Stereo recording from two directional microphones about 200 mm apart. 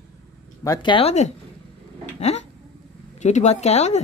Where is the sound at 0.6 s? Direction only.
20° left (ahead or behind).